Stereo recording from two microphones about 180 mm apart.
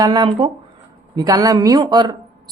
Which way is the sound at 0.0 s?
25° right (ahead or behind).